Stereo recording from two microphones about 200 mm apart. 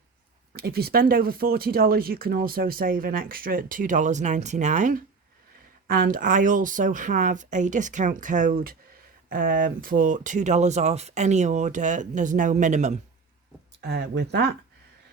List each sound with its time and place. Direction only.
0.5 s speech: 50° right (ahead or behind)
13.8 s speech: 55° right (ahead or behind)